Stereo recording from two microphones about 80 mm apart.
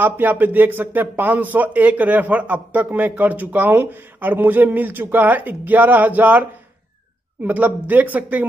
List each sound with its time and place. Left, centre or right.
0.0 s speech: right
7.4 s speech: centre